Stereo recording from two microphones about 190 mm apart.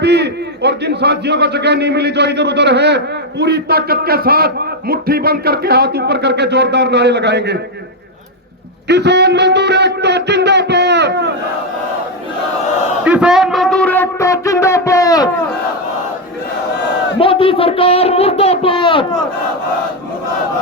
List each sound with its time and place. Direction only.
0.0 s a man's voice: 60° right (ahead or behind)
8.9 s a man's voice: 60° right (ahead or behind)
13.1 s a sound: 5° right (ahead or behind); by 15.3 s 20° left (ahead or behind)
17.2 s speech: 30° left (ahead or behind)